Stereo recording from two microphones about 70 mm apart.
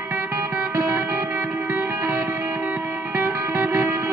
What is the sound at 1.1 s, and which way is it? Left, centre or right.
Music, right.